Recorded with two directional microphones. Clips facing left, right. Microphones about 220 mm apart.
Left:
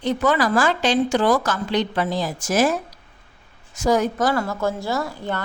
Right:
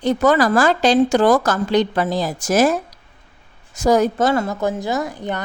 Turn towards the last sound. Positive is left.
turn(degrees=-15)  # may be behind; listen again after turning